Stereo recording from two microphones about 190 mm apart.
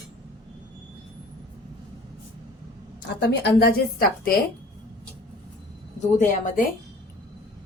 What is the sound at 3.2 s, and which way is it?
A woman's voice, 55° left (ahead or behind).